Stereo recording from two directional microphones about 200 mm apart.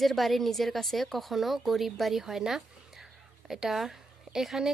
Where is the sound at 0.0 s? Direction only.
Centre (ahead or behind).